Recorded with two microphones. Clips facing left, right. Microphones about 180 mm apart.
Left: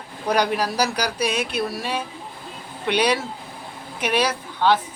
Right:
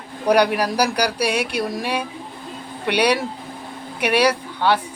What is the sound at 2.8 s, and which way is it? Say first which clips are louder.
Speech: right 2 dB; 60° right (ahead or behind).